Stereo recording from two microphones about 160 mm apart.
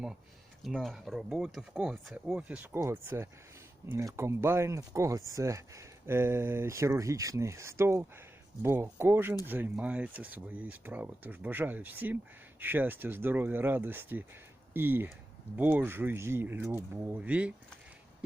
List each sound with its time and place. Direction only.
0.6 s speech: centre (ahead or behind)